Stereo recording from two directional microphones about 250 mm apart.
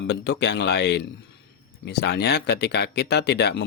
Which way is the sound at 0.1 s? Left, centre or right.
Left.